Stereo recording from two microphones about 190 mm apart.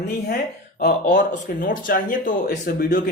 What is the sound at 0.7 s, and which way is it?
A man's voice, 50° left (ahead or behind).